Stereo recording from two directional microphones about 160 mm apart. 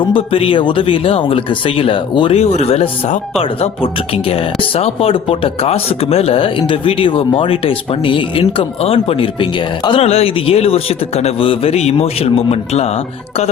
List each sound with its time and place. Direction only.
0.0 s speech: 35° left (ahead or behind)
4.8 s speech: 35° left (ahead or behind)